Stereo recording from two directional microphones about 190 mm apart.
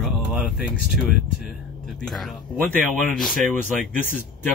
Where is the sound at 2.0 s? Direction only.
Centre (ahead or behind).